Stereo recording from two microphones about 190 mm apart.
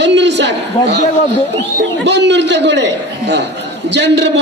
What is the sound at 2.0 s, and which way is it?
A man's voice, 65° right (ahead or behind).